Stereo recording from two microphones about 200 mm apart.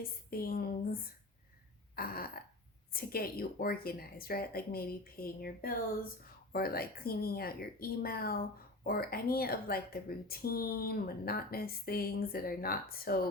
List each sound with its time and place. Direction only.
0.0 s speech: 50° left (ahead or behind)